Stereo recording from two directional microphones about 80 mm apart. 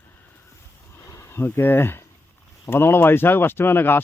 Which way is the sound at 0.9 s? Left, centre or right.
Left.